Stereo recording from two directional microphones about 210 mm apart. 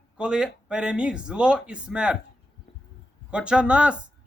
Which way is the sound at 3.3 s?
5° right (ahead or behind).